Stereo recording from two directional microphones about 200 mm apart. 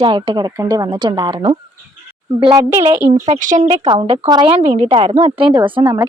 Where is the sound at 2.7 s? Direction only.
15° right (ahead or behind).